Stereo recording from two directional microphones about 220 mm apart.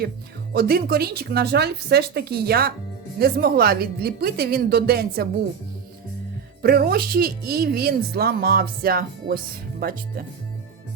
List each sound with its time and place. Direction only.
0.5 s speech: 45° right (ahead or behind)
6.6 s speech: 45° right (ahead or behind)